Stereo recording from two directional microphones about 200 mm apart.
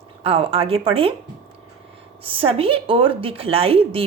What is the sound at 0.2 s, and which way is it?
Speech, 30° right (ahead or behind).